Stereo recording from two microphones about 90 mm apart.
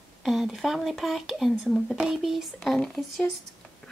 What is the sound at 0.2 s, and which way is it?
Speech, centre (ahead or behind).